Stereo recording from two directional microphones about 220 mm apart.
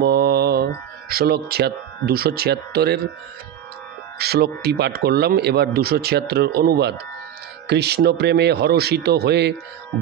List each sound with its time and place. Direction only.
0.0 s speech: 45° right (ahead or behind)
4.2 s speech: 45° right (ahead or behind)